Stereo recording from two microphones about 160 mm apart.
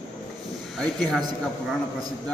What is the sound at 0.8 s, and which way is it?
Speech, 5° left (ahead or behind).